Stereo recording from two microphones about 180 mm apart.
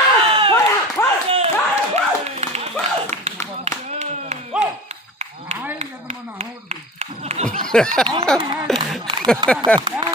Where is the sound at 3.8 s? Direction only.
40° right (ahead or behind).